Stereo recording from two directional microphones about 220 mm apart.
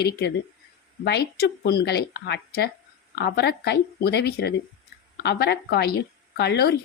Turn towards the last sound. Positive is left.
turn(degrees=45)  # may be behind; listen again after turning